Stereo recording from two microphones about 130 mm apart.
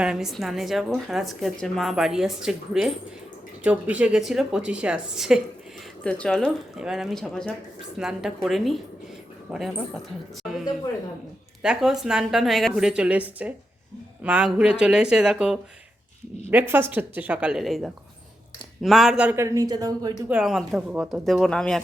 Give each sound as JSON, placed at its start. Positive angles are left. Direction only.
{"t": 0.0, "sound": "a woman's voice", "side_deg": -5}
{"t": 6.0, "sound": "a woman's voice", "side_deg": 10}
{"t": 10.4, "sound": "a sound", "side_deg": -5}
{"t": 11.6, "sound": "a woman's voice", "side_deg": -5}
{"t": 19.4, "sound": "speech", "side_deg": -25}
{"t": 20.2, "sound": "a woman's voice", "side_deg": -5}
{"t": 21.1, "sound": "a woman's voice", "side_deg": 0}